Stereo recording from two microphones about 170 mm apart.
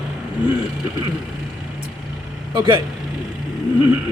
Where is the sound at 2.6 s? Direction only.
25° right (ahead or behind).